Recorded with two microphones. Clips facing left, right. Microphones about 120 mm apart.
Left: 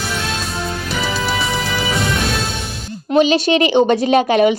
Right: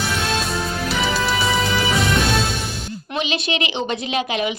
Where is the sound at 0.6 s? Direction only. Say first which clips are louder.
Even; centre (ahead or behind).